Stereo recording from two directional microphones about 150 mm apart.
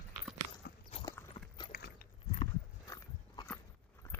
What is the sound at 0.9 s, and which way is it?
Clip-clop, 35° left (ahead or behind).